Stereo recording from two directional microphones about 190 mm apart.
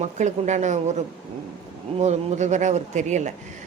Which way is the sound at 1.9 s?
35° right (ahead or behind).